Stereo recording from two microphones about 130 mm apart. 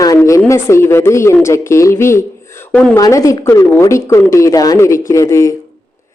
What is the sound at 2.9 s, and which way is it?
Speech, 25° left (ahead or behind).